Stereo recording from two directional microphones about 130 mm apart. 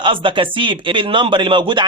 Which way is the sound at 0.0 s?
40° right (ahead or behind).